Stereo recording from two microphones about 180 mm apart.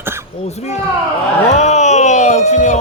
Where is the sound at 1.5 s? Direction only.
40° left (ahead or behind).